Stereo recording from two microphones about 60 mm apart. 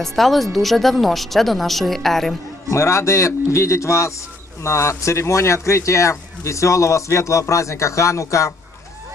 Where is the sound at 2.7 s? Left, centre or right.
Left.